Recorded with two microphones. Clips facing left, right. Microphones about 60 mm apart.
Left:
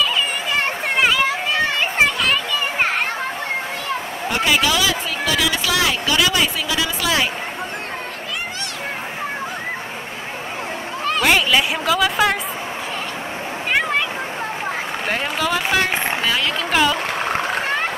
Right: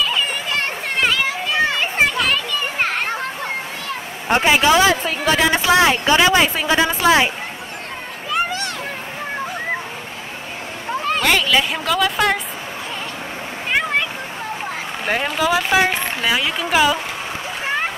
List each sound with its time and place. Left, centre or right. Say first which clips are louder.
0.6 s a sound: left 3 dB; centre
1.8 s children playing: even; centre
4.3 s a man's voice: right 5 dB; right
11.1 s a woman's voice: left 1 dB; centre
13.7 s a sound: even; centre
15.0 s a woman's voice: right 4 dB; centre